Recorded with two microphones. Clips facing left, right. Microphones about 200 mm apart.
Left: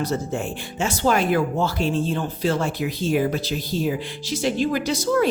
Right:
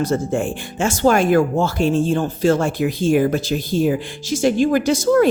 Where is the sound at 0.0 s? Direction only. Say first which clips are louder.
Right 5 dB; 50° right (ahead or behind).